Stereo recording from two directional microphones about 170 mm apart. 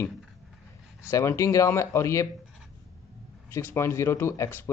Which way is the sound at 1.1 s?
15° left (ahead or behind).